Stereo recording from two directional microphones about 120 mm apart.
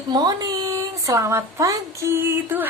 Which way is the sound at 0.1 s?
35° right (ahead or behind).